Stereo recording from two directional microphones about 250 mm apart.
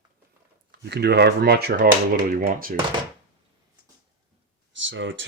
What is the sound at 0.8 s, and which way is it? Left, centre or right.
Speech, right.